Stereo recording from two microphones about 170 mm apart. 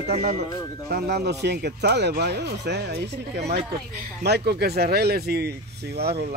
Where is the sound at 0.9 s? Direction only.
65° right (ahead or behind).